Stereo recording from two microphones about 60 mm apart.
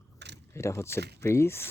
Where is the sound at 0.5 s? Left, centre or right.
Left.